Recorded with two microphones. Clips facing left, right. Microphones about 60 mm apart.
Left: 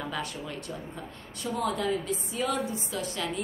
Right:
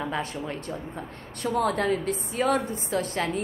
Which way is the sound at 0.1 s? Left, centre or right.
Right.